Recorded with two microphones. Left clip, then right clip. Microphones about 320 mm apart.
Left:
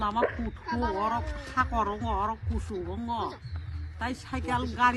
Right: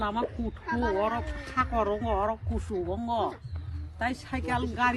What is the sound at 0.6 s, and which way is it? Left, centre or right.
Speech, left.